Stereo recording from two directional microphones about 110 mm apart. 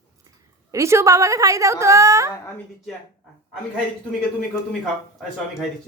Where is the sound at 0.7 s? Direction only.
25° right (ahead or behind).